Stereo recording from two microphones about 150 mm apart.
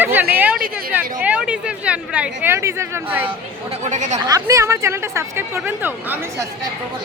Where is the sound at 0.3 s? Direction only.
10° right (ahead or behind).